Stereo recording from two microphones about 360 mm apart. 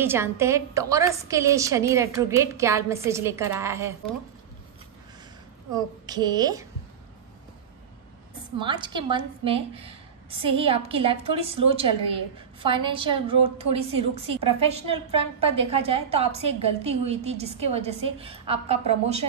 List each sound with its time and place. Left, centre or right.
0.0 s a woman's voice: centre
6.0 s a woman's voice: centre
8.5 s a woman's voice: centre